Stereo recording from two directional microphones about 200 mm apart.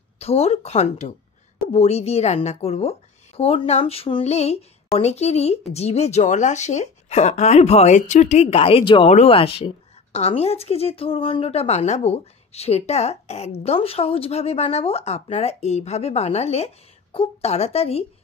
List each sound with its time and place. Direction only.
0.2 s speech: 30° left (ahead or behind)